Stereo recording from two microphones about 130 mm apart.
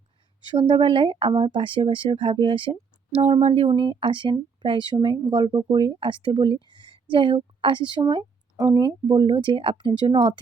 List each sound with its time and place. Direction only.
0.5 s speech: 40° right (ahead or behind)